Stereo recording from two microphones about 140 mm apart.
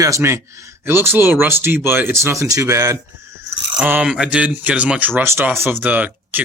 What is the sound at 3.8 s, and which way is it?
Speech, 10° right (ahead or behind).